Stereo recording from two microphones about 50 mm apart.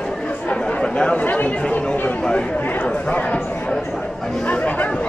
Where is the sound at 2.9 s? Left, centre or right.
Left.